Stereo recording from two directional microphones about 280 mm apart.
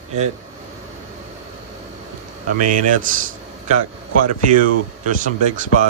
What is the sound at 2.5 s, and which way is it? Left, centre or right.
Speech, right.